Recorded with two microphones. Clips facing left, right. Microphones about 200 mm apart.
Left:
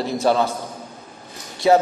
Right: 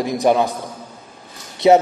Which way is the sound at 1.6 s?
20° right (ahead or behind).